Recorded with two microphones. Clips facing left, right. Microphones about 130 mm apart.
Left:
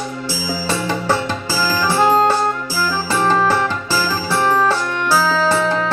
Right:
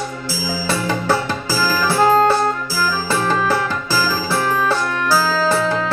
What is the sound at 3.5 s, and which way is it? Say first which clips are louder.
Music: left 1 dB; 10° right (ahead or behind).